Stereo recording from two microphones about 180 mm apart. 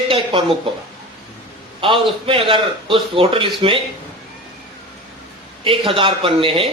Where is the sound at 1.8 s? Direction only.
30° right (ahead or behind).